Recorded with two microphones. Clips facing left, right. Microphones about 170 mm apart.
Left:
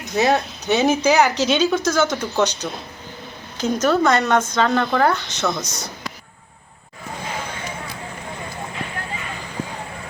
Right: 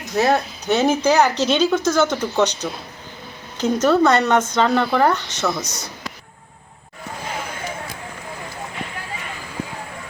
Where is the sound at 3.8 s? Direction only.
Centre (ahead or behind).